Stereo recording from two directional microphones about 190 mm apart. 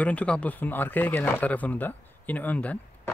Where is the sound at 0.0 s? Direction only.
5° left (ahead or behind).